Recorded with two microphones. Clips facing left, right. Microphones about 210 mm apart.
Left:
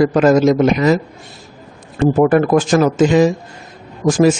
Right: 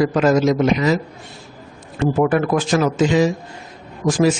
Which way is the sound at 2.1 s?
45° left (ahead or behind).